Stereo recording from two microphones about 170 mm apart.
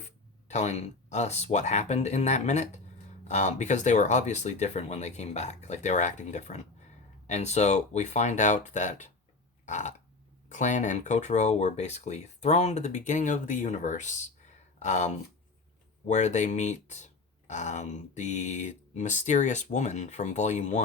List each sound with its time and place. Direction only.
0.4 s speech: 40° left (ahead or behind)
9.6 s burping: 45° left (ahead or behind)
10.5 s speech: 45° left (ahead or behind)